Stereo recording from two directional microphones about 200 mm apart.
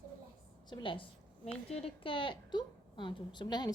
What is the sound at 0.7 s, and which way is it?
A woman's voice, 25° left (ahead or behind).